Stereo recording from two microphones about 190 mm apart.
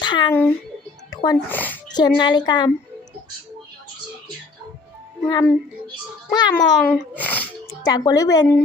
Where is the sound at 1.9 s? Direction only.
20° left (ahead or behind).